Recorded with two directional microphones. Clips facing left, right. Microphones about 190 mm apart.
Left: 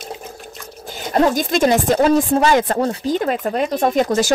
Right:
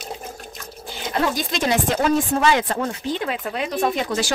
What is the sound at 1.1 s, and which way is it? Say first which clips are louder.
Speech: left 7 dB; 45° left (ahead or behind).